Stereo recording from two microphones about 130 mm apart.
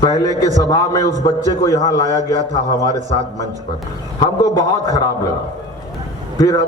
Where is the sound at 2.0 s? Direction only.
25° right (ahead or behind).